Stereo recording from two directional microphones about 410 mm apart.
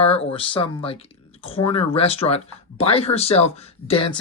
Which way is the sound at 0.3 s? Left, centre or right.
Centre.